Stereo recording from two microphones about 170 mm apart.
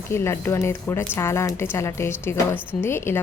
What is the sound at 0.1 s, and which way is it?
A woman's voice, 15° left (ahead or behind).